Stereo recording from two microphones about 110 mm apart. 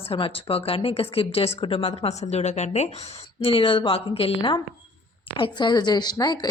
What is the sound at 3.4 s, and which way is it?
A woman's voice, 55° left (ahead or behind).